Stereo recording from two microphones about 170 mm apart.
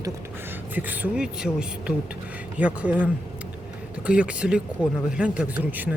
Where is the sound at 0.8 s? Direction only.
10° right (ahead or behind).